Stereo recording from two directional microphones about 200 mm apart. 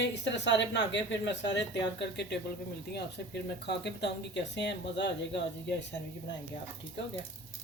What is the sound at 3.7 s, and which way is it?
Speech, 55° left (ahead or behind).